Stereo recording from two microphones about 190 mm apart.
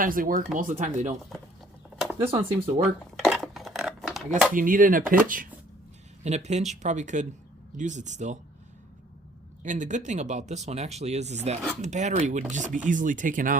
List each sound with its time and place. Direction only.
0.0 s speech: 45° right (ahead or behind)
1.3 s speech: centre (ahead or behind)
2.2 s speech: 30° right (ahead or behind)
3.2 s a sound: centre (ahead or behind)
4.5 s speech: 45° right (ahead or behind)
9.6 s speech: 40° right (ahead or behind)